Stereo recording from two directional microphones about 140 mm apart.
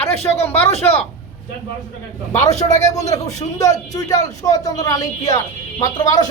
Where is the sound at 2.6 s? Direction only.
25° left (ahead or behind).